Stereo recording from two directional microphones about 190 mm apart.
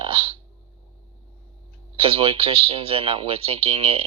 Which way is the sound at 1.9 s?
30° right (ahead or behind).